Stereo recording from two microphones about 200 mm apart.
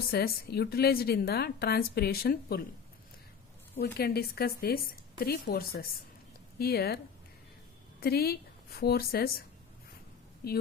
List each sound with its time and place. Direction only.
0.1 s a woman's voice: 55° left (ahead or behind)
3.9 s a woman's voice: 50° left (ahead or behind)
8.0 s a woman's voice: 50° left (ahead or behind)